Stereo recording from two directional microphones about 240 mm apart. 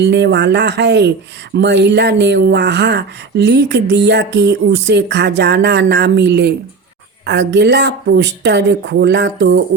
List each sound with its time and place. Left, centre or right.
0.0 s speech: right